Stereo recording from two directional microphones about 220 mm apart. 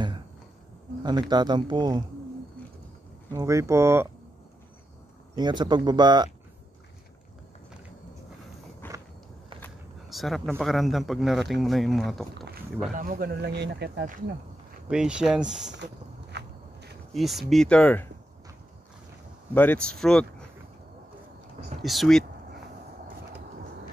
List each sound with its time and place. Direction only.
1.3 s speech: 20° right (ahead or behind)
3.3 s speech: 15° right (ahead or behind)
5.3 s speech: 20° right (ahead or behind)
8.8 s walk: 10° left (ahead or behind)
9.6 s a sound: centre (ahead or behind)
10.6 s speech: centre (ahead or behind)
12.9 s speech: 40° right (ahead or behind)
14.9 s speech: 5° right (ahead or behind)
15.7 s a sound: 50° right (ahead or behind)
17.1 s speech: centre (ahead or behind)
19.5 s speech: 10° left (ahead or behind)
21.8 s speech: centre (ahead or behind)